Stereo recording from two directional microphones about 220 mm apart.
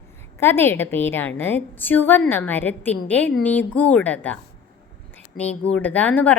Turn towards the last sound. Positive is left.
turn(degrees=5)  # may be behind; listen again after turning